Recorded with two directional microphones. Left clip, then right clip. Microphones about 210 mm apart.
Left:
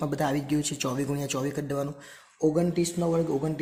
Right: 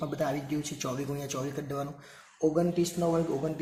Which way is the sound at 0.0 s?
45° left (ahead or behind).